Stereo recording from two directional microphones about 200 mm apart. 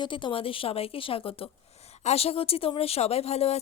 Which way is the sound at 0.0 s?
25° left (ahead or behind).